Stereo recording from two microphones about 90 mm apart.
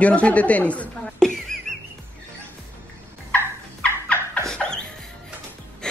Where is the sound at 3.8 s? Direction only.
10° left (ahead or behind).